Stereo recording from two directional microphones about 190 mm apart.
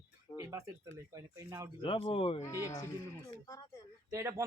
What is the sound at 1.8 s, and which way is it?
Speech, 30° left (ahead or behind).